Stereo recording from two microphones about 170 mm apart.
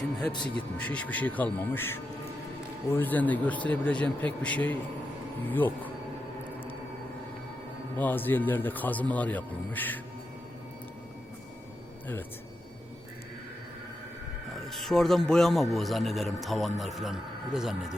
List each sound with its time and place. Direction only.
0.8 s speech: 10° left (ahead or behind)
7.9 s speech: 10° left (ahead or behind)
14.5 s speech: centre (ahead or behind)